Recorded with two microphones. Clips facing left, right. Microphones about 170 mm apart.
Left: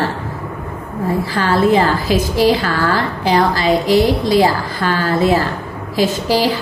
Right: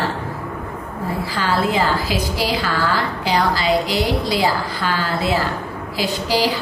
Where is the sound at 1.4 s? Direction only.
50° left (ahead or behind).